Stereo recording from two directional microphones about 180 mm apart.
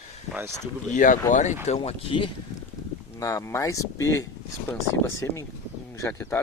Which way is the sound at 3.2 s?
20° left (ahead or behind).